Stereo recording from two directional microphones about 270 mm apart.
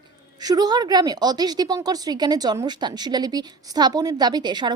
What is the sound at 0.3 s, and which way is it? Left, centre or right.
A woman's voice, centre.